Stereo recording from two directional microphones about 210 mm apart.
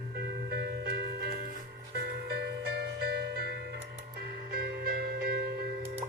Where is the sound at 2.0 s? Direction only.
55° right (ahead or behind).